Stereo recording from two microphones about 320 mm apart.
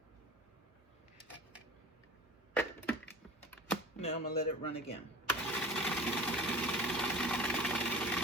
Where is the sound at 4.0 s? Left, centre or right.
Centre.